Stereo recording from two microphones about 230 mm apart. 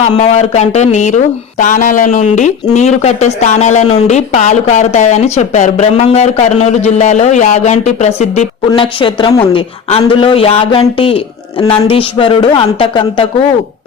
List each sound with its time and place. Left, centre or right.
0.2 s speech: left